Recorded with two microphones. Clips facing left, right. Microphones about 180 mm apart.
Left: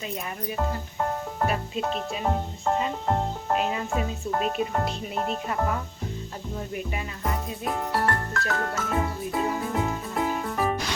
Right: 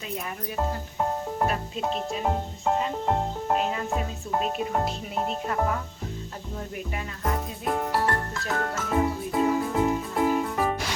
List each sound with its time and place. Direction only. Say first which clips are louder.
1.5 s speech: left 1 dB; 5° left (ahead or behind)
6.9 s music: right 4 dB; centre (ahead or behind)